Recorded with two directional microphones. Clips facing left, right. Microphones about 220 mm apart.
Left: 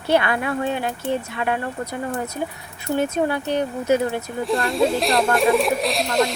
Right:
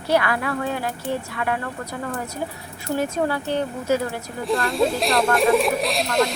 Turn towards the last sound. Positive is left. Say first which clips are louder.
# left 1 dB
turn(degrees=0)  # may be behind; listen again after turning